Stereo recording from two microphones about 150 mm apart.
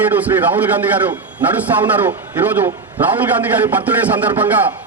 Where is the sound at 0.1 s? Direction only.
10° right (ahead or behind).